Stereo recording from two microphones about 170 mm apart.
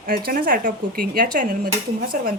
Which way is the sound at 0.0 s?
60° right (ahead or behind).